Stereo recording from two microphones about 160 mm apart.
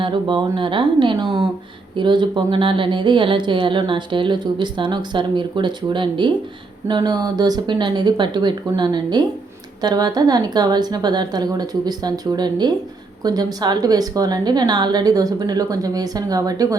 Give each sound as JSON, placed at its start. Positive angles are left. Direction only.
{"t": 0.0, "sound": "speech", "side_deg": -30}